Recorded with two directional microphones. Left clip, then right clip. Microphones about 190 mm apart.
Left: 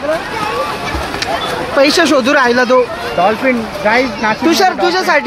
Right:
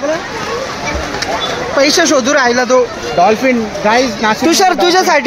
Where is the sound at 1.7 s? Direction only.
Centre (ahead or behind).